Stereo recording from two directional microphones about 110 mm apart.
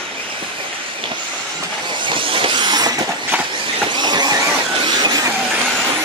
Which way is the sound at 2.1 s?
50° right (ahead or behind).